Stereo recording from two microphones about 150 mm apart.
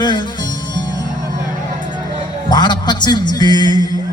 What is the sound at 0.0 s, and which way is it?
Music, 30° left (ahead or behind).